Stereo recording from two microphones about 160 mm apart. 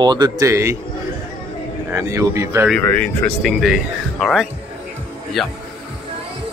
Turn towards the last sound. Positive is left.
turn(degrees=0)  # may be behind; listen again after turning